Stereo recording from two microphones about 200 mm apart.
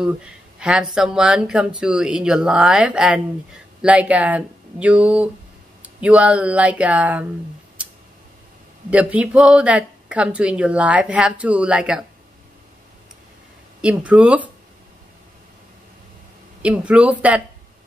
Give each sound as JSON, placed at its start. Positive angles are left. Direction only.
{"t": 0.0, "sound": "speech", "side_deg": -5}
{"t": 8.9, "sound": "speech", "side_deg": -5}
{"t": 13.7, "sound": "speech", "side_deg": -5}
{"t": 16.6, "sound": "speech", "side_deg": -5}